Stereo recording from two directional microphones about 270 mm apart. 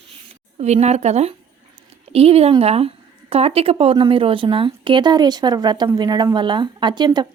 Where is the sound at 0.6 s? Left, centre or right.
Right.